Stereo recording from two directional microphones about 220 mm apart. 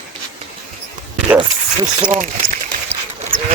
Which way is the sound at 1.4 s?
25° right (ahead or behind).